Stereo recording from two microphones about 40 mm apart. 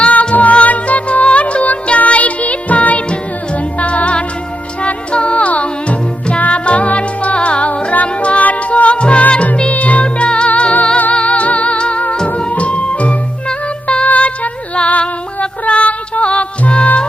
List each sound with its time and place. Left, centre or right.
0.1 s music: left